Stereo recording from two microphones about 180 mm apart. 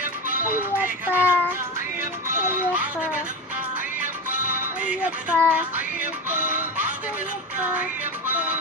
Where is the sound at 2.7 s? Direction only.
10° right (ahead or behind).